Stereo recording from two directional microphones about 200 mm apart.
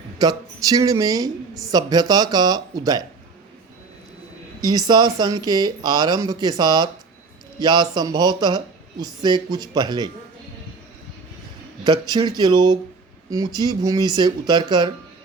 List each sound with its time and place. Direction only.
0.2 s a woman's voice: 20° right (ahead or behind)
4.9 s a woman's voice: 20° right (ahead or behind)
11.8 s a woman's voice: 20° right (ahead or behind)